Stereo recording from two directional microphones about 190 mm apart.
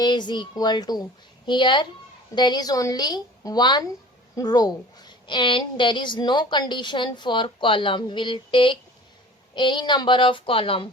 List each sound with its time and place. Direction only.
0.0 s a woman's voice: 25° left (ahead or behind)